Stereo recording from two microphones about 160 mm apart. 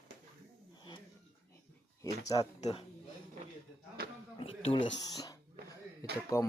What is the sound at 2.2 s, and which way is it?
Speech, 20° left (ahead or behind).